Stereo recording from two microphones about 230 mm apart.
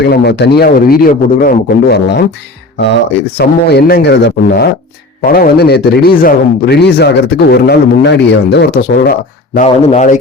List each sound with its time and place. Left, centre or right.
0.0 s speech: left
9.6 s a man's voice: left